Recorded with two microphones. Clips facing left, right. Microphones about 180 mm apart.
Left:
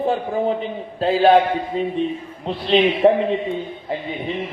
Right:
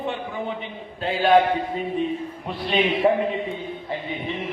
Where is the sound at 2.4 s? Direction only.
25° left (ahead or behind).